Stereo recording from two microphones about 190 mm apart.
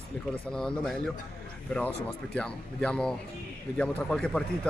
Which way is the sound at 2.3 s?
5° left (ahead or behind).